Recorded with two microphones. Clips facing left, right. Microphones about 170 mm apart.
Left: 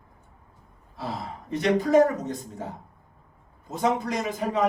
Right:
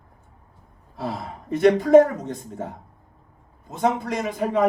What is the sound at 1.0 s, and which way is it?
Speech, 55° right (ahead or behind).